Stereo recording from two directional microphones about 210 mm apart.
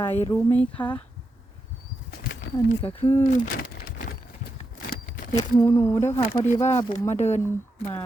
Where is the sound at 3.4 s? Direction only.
50° left (ahead or behind).